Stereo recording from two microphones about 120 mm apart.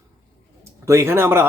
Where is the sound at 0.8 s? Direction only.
20° right (ahead or behind).